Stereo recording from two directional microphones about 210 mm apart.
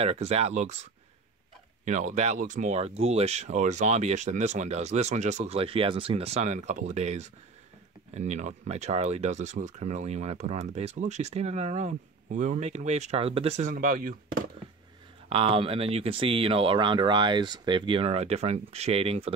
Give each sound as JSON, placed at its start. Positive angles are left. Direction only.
{"t": 0.0, "sound": "speech", "side_deg": -30}
{"t": 1.9, "sound": "speech", "side_deg": -35}
{"t": 15.2, "sound": "speech", "side_deg": -25}